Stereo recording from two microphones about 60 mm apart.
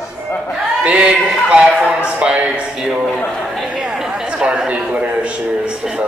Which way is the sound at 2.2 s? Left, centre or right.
Centre.